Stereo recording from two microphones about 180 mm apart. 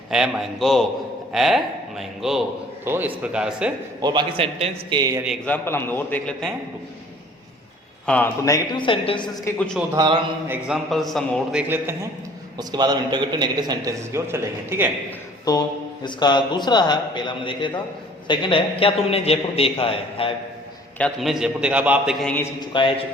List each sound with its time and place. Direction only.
0.1 s a man's voice: 5° right (ahead or behind)
4.0 s a man's voice: 25° right (ahead or behind)
5.5 s a man's voice: 10° left (ahead or behind)
8.0 s a man's voice: 5° left (ahead or behind)
8.4 s a man's voice: 25° left (ahead or behind)
9.5 s a man's voice: 15° left (ahead or behind)
9.9 s a man's voice: 20° right (ahead or behind)
10.5 s a man's voice: centre (ahead or behind)
12.5 s a man's voice: 20° right (ahead or behind)
15.5 s a man's voice: 20° left (ahead or behind)
21.0 s a man's voice: centre (ahead or behind)
22.2 s a man's voice: 5° left (ahead or behind)
22.6 s a man's voice: 25° left (ahead or behind)